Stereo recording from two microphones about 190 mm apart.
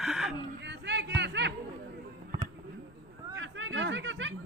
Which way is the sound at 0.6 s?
65° right (ahead or behind).